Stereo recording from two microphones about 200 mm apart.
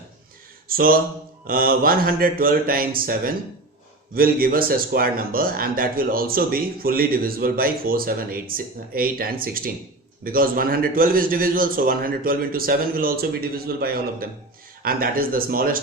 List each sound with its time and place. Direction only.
0.7 s speech: 45° right (ahead or behind)